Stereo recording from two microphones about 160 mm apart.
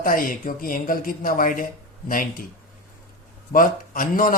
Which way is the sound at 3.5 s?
60° left (ahead or behind).